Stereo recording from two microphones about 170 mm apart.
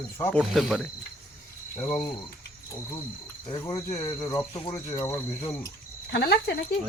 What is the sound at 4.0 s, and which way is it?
A man's voice, 20° left (ahead or behind).